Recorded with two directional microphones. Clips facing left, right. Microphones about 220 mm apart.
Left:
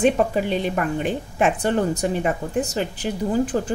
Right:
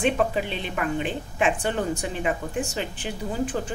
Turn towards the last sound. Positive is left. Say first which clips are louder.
# left 6 dB
turn(degrees=40)  # may be behind; listen again after turning